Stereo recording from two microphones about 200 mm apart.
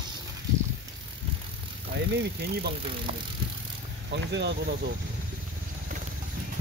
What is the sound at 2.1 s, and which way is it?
Speech, 50° right (ahead or behind).